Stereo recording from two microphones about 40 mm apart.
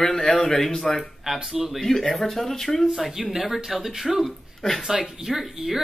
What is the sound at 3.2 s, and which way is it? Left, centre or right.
Speech, centre.